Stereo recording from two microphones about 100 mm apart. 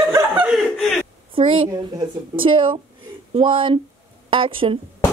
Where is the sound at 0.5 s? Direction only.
Centre (ahead or behind).